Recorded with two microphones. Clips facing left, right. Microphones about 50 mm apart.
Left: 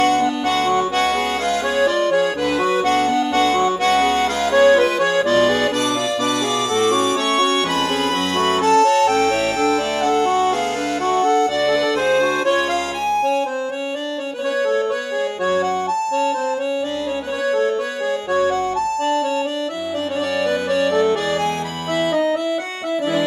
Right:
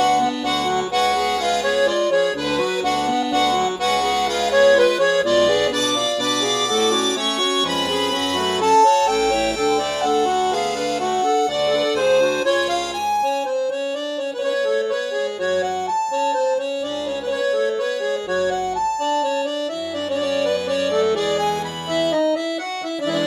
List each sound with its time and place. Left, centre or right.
0.0 s accordion: left
2.8 s accordion: left
4.4 s accordion: left
8.4 s music: left
11.1 s accordion: left
16.1 s music: left
20.4 s music: left